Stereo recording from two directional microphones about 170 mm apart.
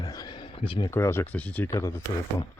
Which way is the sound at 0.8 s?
15° left (ahead or behind).